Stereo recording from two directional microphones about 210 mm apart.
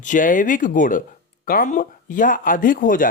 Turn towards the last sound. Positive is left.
turn(degrees=40)  # may be behind; listen again after turning